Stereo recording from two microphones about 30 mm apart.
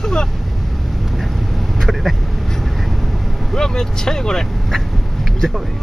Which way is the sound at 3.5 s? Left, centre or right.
Centre.